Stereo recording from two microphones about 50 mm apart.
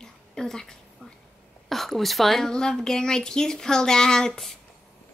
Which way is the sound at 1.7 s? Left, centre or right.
Centre.